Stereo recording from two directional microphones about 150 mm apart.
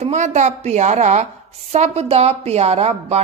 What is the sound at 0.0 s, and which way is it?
A woman's voice, 50° right (ahead or behind).